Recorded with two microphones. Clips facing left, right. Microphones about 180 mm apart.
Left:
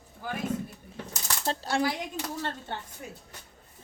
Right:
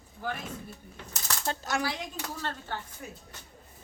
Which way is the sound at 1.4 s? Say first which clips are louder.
Left 3 dB; 30° left (ahead or behind).